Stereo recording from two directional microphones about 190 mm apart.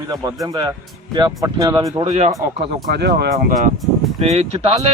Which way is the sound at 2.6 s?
60° right (ahead or behind).